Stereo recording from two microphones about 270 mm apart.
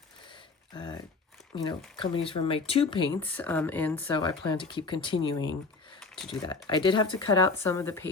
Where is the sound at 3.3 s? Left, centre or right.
Centre.